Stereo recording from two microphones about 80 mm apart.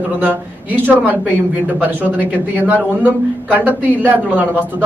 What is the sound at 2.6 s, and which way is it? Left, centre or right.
A man's voice, right.